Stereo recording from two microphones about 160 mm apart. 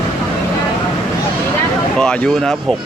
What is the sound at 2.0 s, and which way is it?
Speech, 5° left (ahead or behind).